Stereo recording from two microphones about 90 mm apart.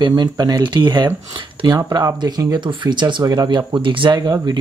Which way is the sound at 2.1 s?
45° right (ahead or behind).